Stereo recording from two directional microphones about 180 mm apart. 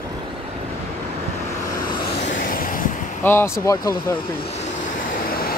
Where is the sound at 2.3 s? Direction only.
50° left (ahead or behind).